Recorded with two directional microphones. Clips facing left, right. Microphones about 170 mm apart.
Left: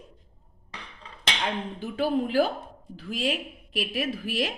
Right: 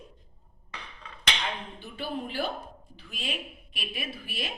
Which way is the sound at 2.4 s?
90° left.